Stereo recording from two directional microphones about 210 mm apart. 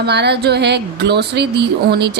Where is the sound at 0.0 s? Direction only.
50° right (ahead or behind).